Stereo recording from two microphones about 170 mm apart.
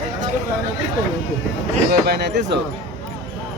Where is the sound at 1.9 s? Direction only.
70° right (ahead or behind); by 2.6 s 85° right.